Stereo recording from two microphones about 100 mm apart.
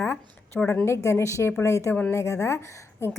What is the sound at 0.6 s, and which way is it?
Speech, 15° left (ahead or behind).